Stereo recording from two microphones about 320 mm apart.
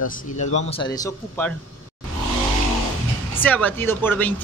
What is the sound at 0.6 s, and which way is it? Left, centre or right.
Speech, centre.